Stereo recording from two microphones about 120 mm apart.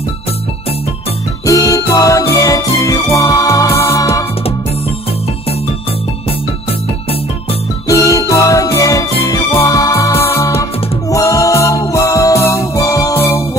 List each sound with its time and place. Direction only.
1.4 s music: 30° left (ahead or behind)
7.9 s music: 30° left (ahead or behind)